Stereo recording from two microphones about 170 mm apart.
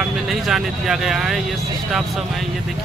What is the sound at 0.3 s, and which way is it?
Speech, centre (ahead or behind).